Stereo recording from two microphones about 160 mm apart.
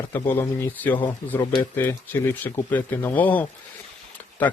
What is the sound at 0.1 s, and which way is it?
Speech, 15° left (ahead or behind).